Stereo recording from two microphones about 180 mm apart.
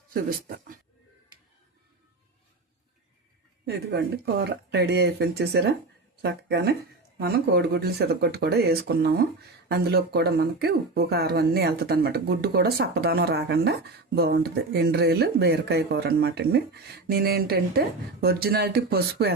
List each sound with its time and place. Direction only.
0.1 s speech: 55° right (ahead or behind)
3.7 s speech: 65° right (ahead or behind)